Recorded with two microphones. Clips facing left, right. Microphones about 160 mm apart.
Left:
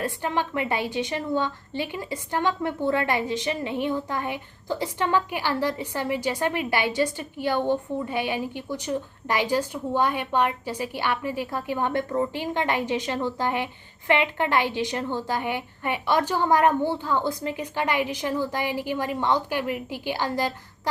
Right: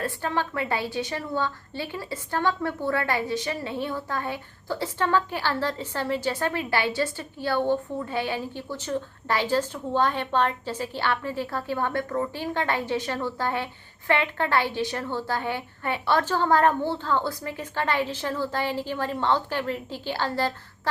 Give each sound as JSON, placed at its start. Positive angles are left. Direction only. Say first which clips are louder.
{"t": 0.0, "sound": "a woman's voice", "louder": "left 1 dB", "side_deg": 15}